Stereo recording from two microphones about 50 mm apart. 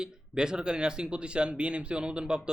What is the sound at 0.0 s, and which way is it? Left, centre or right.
Speech, centre.